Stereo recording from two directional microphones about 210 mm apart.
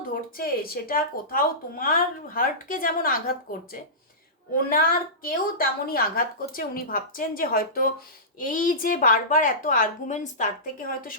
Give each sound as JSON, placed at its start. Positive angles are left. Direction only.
{"t": 0.1, "sound": "speech", "side_deg": 45}
{"t": 4.7, "sound": "a woman's voice", "side_deg": 45}